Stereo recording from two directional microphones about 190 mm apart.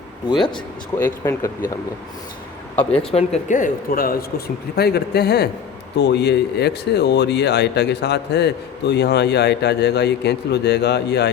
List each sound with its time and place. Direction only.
0.9 s speech: 15° left (ahead or behind)
3.0 s speech: 30° left (ahead or behind); by 11.3 s 60° left (ahead or behind)